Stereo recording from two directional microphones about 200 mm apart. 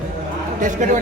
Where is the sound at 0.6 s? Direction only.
40° right (ahead or behind).